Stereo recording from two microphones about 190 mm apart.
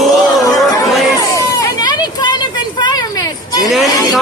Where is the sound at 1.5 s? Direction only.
20° left (ahead or behind).